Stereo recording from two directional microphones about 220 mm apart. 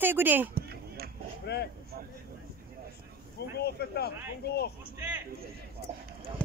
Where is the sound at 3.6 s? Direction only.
45° left (ahead or behind).